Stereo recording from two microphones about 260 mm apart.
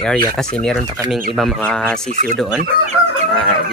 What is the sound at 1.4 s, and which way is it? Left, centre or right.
Speech, centre.